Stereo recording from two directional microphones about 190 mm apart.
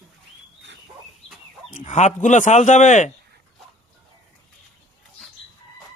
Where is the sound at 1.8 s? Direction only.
40° left (ahead or behind).